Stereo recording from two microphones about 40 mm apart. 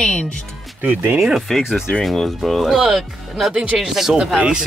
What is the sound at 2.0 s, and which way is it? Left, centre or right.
Speech, centre.